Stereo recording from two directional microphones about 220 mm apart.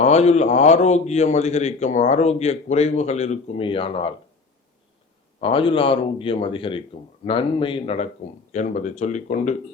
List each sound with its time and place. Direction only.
0.0 s a man's voice: 30° left (ahead or behind)
5.4 s a man's voice: 25° left (ahead or behind)